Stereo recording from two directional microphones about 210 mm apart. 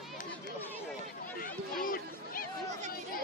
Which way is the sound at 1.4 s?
45° left (ahead or behind).